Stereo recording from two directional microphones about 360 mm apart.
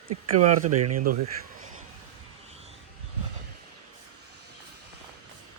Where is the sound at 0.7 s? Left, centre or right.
Right.